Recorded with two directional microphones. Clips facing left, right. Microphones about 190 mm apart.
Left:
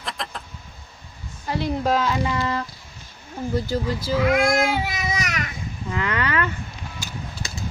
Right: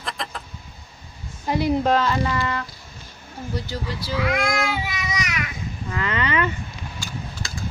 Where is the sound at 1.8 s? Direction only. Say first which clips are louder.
Right 1 dB; 5° left (ahead or behind).